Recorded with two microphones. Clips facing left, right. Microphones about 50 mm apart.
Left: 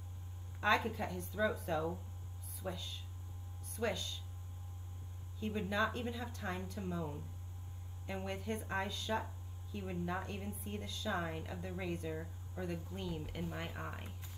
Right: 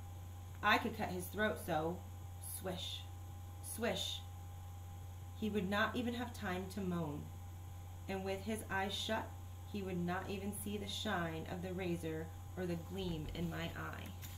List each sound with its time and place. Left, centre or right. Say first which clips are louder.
0.6 s speech: left 1 dB; centre
2.6 s speech: left 1 dB; centre
3.7 s speech: left 1 dB; centre
5.4 s speech: left 1 dB; centre
8.3 s speech: left 1 dB; centre
9.8 s a woman's voice: even; centre
10.2 s speech: right 1 dB; centre
11.2 s a woman's voice: even; centre